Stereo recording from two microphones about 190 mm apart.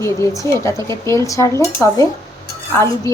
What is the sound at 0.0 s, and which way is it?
A woman's voice, 15° left (ahead or behind).